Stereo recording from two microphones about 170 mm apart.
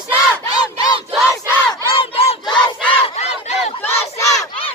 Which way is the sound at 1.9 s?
35° left (ahead or behind).